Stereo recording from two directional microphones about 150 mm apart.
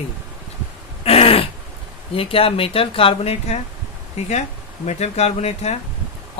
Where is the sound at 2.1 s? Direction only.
40° left (ahead or behind).